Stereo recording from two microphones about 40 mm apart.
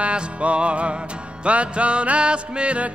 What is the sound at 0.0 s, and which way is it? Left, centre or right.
Music, right.